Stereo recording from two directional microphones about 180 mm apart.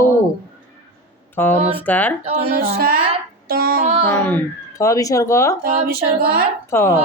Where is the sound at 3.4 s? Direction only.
55° right (ahead or behind).